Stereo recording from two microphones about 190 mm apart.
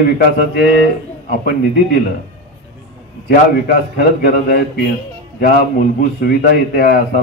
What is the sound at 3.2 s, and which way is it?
A man's voice, 50° left (ahead or behind).